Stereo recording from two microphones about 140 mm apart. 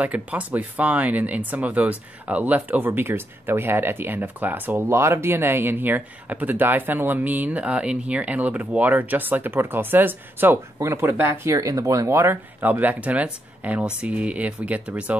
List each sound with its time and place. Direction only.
0.0 s speech: 10° right (ahead or behind)